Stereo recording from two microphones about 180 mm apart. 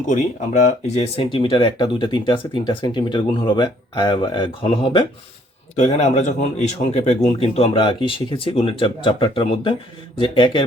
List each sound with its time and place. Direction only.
0.1 s speech: 40° left (ahead or behind)
5.7 s speech: 40° left (ahead or behind)